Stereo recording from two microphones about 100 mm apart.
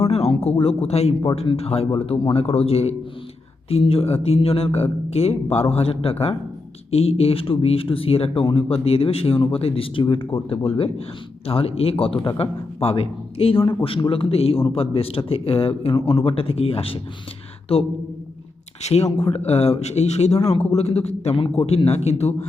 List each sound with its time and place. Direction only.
0.0 s a sound: 90° left
0.6 s a man's voice: 90° left
2.0 s a man's voice: 70° left (ahead or behind)
12.8 s a man's voice: 75° left (ahead or behind)
18.8 s a man's voice: 90° left